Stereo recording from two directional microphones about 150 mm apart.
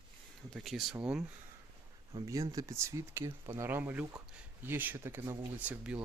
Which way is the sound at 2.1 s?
20° right (ahead or behind).